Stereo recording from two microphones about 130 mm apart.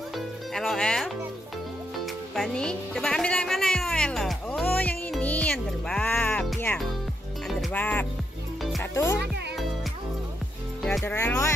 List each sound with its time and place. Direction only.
0.6 s music: 5° left (ahead or behind)
2.3 s music: 5° left (ahead or behind)
8.9 s speech: 25° left (ahead or behind)
11.1 s speech: 15° left (ahead or behind)